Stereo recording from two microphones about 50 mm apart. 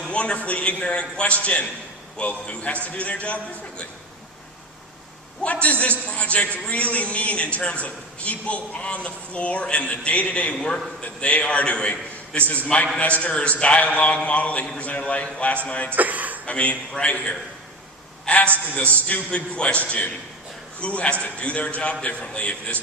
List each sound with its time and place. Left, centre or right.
0.1 s a man's voice: left
5.4 s a man's voice: left
16.0 s a sound: right
16.5 s a man's voice: left